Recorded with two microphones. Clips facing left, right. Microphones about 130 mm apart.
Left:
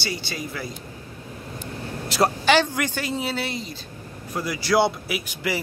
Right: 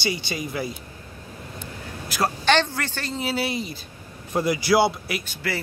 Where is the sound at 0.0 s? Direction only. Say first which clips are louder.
Right 3 dB; 15° right (ahead or behind).